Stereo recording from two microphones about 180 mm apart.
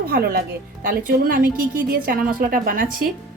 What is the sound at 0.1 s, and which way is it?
A woman's voice, 60° right (ahead or behind).